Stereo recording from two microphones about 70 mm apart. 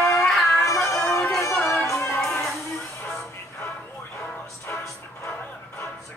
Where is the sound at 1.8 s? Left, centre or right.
Left.